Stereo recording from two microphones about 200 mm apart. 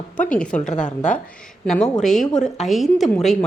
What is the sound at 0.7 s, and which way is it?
Speech, 40° left (ahead or behind).